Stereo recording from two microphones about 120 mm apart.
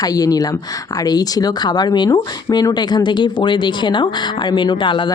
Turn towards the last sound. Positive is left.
turn(degrees=45)  # may be behind; listen again after turning